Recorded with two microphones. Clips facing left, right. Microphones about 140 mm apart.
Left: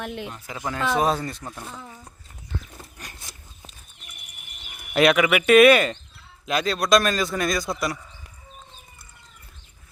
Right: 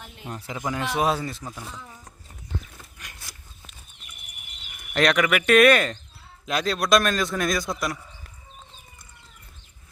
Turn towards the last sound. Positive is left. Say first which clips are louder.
# left 1 dB
turn(degrees=0)  # may be behind; listen again after turning